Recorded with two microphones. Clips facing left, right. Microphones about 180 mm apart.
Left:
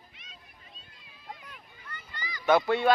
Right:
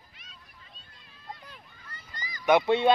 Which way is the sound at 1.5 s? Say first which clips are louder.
Left 2 dB; 40° right (ahead or behind).